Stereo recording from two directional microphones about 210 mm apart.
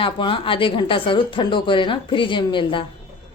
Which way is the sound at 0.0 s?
25° left (ahead or behind).